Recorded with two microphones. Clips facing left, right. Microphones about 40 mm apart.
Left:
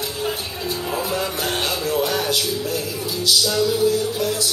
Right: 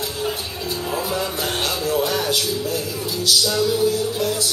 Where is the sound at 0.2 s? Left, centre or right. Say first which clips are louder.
Left 1 dB; centre.